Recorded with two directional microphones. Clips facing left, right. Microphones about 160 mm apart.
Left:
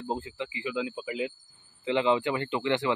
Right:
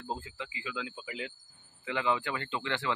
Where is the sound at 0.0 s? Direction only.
20° left (ahead or behind).